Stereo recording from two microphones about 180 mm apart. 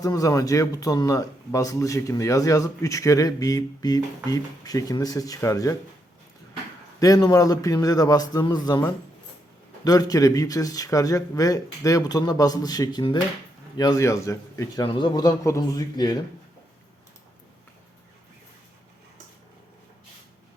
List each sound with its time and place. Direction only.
0.0 s speech: 20° left (ahead or behind)
7.0 s speech: 20° left (ahead or behind)
9.8 s a man's voice: 20° left (ahead or behind)